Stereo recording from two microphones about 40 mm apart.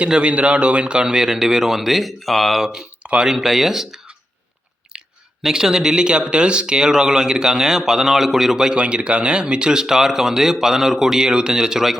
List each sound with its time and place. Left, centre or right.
0.1 s speech: right; by 2.6 s centre
2.6 s speech: centre
4.9 s speech: centre
8.8 s speech: right; by 11.9 s centre